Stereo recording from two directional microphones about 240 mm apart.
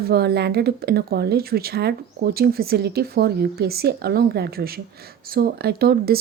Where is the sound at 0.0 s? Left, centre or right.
Right.